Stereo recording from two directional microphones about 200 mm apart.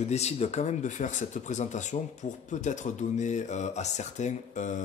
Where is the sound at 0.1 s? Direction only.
35° left (ahead or behind).